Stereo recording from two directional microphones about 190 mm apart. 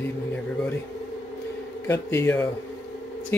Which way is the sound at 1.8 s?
15° left (ahead or behind).